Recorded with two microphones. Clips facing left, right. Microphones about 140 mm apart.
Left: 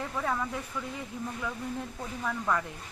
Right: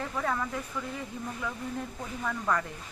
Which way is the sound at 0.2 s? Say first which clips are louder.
Even; 5° left (ahead or behind).